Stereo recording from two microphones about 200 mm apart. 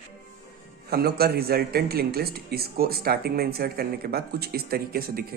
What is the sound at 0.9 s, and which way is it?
Speech, 50° right (ahead or behind).